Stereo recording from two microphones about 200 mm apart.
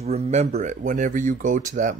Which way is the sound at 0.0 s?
30° right (ahead or behind).